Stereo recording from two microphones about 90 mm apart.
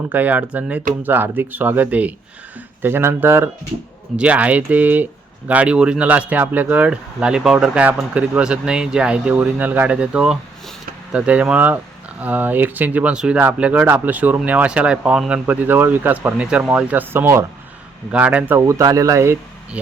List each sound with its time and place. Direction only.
0.1 s speech: 20° right (ahead or behind)
4.2 s speech: 15° right (ahead or behind)
18.1 s speech: 15° right (ahead or behind)
18.6 s speech: 40° right (ahead or behind)